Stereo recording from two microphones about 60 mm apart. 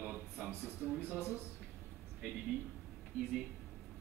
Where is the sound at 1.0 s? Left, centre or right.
Left.